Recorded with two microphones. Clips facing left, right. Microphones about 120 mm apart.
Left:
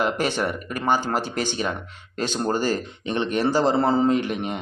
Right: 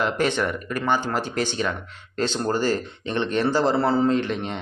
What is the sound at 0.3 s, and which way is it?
Speech, 10° left (ahead or behind).